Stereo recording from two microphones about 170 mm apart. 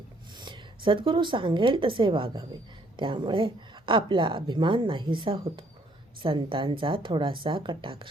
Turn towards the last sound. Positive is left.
turn(degrees=-30)  # may be behind; listen again after turning